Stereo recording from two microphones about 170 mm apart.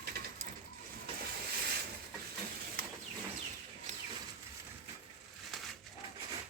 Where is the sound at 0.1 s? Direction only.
65° right (ahead or behind).